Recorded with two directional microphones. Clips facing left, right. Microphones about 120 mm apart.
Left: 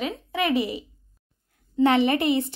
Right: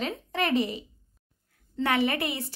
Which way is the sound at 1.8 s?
25° left (ahead or behind).